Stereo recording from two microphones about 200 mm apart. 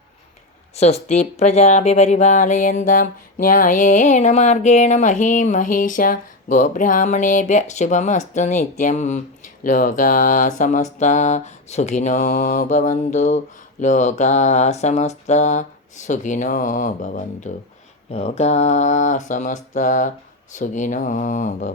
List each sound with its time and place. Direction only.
0.8 s speech: 30° left (ahead or behind)